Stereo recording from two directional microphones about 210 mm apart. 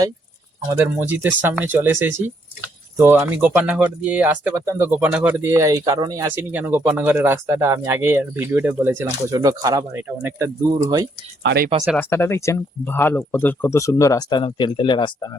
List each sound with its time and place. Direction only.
0.8 s speech: 10° right (ahead or behind)
11.4 s speech: 50° right (ahead or behind)
11.9 s speech: 10° left (ahead or behind)